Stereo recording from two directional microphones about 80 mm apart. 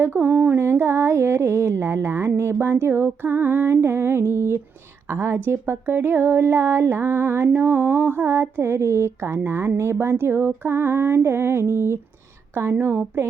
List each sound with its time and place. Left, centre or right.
0.0 s speech: right